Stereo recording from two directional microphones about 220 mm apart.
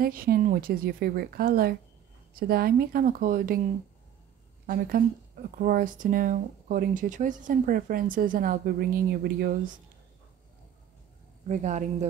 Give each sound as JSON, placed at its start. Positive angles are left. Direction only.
{"t": 0.0, "sound": "a woman's voice", "side_deg": -40}
{"t": 4.6, "sound": "speech", "side_deg": -40}
{"t": 11.4, "sound": "speech", "side_deg": -35}